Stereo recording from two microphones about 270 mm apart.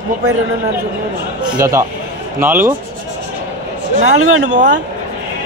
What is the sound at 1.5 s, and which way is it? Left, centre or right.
A man's voice, centre.